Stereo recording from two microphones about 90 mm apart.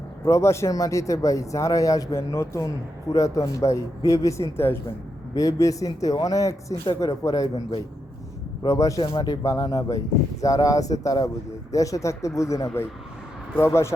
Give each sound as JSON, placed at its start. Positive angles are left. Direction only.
{"t": 0.3, "sound": "speech", "side_deg": 30}
{"t": 5.3, "sound": "speech", "side_deg": 40}
{"t": 8.6, "sound": "speech", "side_deg": 40}